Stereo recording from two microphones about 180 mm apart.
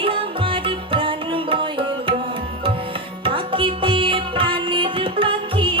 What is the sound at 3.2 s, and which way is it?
Music, 30° right (ahead or behind).